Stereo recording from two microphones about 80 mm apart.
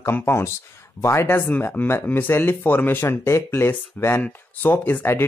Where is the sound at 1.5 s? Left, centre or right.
Left.